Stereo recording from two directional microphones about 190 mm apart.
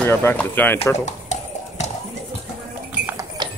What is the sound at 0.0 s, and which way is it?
Speech, 10° left (ahead or behind).